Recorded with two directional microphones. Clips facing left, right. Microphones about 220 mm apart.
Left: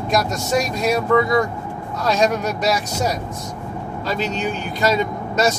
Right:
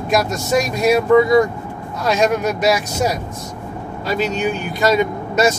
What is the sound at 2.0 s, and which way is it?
Speech, 5° right (ahead or behind).